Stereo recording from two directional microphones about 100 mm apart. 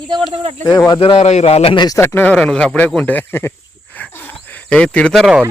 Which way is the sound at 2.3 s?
10° left (ahead or behind).